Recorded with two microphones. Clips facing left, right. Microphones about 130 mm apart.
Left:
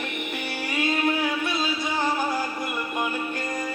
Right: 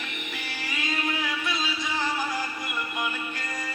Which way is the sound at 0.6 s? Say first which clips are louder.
Left 7 dB; 55° left (ahead or behind).